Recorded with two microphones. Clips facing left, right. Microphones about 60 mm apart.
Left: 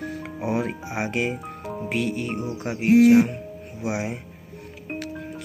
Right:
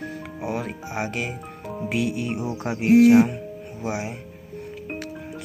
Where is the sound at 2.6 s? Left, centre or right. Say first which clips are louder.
Right 1 dB; centre.